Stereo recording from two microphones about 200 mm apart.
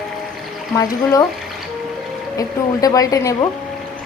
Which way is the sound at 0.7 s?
15° left (ahead or behind).